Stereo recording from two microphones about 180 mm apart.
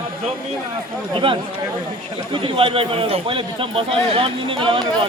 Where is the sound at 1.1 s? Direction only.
30° right (ahead or behind).